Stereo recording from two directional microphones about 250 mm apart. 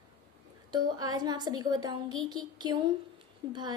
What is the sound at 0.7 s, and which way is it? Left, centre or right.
A woman's voice, centre.